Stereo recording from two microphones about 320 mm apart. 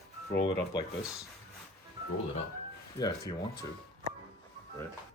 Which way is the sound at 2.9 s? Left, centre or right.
Centre.